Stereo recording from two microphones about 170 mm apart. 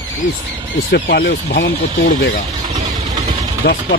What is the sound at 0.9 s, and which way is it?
Speech, 75° left (ahead or behind).